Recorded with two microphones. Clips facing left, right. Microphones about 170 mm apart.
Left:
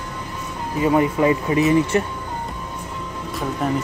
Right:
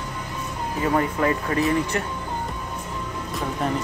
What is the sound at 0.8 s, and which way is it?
Speech, 15° left (ahead or behind).